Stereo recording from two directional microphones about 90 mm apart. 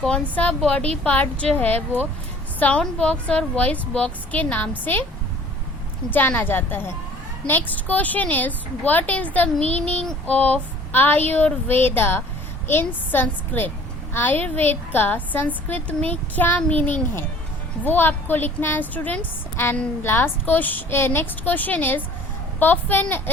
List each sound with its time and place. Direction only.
0.0 s a woman's voice: 15° left (ahead or behind)
6.1 s a woman's voice: 20° left (ahead or behind)